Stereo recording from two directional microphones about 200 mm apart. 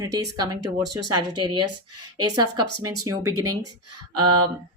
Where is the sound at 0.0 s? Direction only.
15° right (ahead or behind).